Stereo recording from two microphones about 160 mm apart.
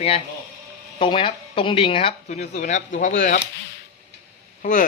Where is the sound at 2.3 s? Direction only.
45° left (ahead or behind).